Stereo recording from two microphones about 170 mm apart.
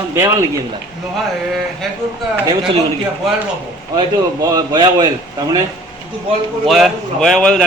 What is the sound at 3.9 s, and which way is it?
A man's voice, 25° right (ahead or behind).